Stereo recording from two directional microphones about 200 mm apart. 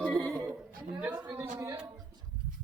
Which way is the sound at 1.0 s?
5° right (ahead or behind).